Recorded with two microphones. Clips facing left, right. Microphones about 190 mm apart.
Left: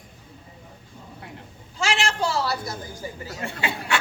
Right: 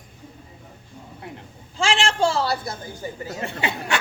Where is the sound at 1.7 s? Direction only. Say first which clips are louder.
Right 3 dB; 30° right (ahead or behind).